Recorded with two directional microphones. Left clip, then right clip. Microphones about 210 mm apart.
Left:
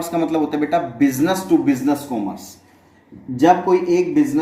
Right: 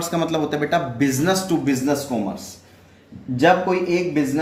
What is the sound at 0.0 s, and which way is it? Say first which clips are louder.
Speech: left 2 dB; 50° right (ahead or behind).